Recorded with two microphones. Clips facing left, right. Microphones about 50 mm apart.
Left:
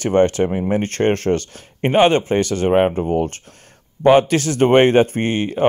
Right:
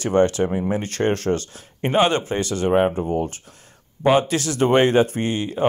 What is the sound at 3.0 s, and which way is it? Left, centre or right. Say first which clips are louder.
Speech: left 4 dB; left.